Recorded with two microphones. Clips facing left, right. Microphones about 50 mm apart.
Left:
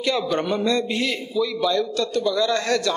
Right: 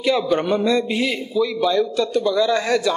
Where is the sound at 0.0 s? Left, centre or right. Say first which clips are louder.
Right 4 dB; centre.